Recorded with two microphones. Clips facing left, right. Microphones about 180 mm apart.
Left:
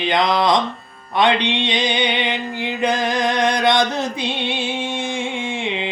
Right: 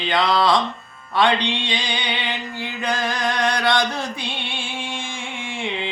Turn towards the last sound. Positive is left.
turn(degrees=20)  # may be behind; listen again after turning